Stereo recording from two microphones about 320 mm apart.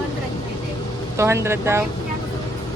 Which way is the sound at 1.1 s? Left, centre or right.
Centre.